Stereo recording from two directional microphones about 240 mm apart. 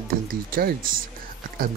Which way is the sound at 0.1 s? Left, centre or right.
Right.